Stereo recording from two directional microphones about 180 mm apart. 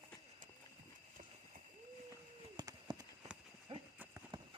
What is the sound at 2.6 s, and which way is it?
Horse, 20° right (ahead or behind).